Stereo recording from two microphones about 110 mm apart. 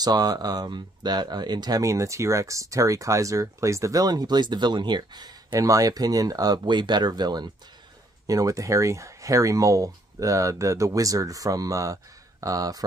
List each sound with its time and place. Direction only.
0.0 s speech: 35° right (ahead or behind)